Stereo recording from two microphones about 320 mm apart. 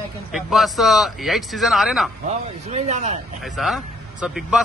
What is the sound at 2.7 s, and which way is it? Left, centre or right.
Speech, right.